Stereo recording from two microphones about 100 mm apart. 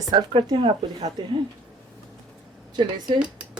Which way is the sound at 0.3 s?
50° right (ahead or behind).